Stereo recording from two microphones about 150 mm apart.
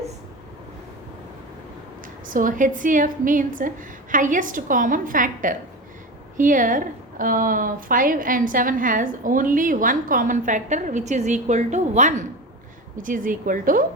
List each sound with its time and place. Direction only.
2.2 s a woman's voice: 65° right (ahead or behind)
13.0 s a woman's voice: 65° right (ahead or behind)